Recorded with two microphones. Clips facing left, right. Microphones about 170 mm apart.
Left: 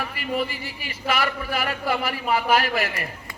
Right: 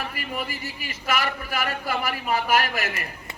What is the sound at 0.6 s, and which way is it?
Speech, 45° right (ahead or behind).